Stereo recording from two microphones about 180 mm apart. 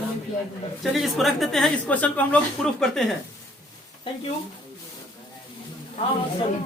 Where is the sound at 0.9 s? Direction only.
Centre (ahead or behind).